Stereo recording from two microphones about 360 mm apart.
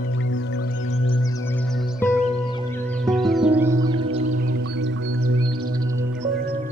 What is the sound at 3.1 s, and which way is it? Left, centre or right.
Music, centre.